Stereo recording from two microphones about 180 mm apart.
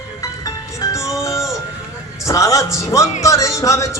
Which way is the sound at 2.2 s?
15° left (ahead or behind).